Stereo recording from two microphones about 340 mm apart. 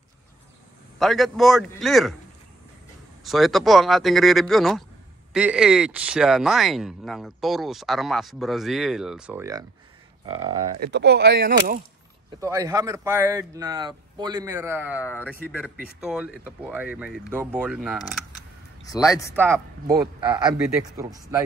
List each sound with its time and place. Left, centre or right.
0.9 s speech: centre
3.3 s speech: centre
10.8 s speech: right
12.4 s speech: centre
15.0 s speech: centre
18.9 s speech: centre
19.1 s speech: centre